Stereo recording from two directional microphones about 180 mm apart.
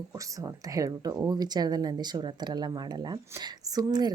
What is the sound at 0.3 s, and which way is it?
A woman's voice, 20° right (ahead or behind).